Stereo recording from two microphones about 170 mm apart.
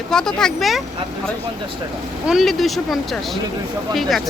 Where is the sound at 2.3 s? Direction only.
Centre (ahead or behind).